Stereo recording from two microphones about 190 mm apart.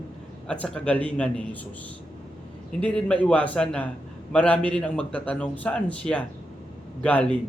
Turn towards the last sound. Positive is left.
turn(degrees=5)  # may be behind; listen again after turning